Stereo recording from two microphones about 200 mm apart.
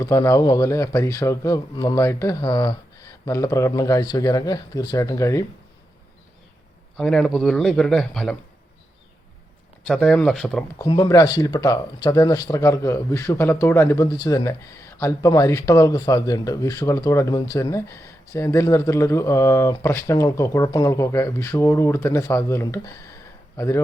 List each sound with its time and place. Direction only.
0.0 s speech: 15° left (ahead or behind)
6.9 s a man's voice: centre (ahead or behind)
9.8 s a man's voice: 5° left (ahead or behind)
10.8 s speech: 20° left (ahead or behind)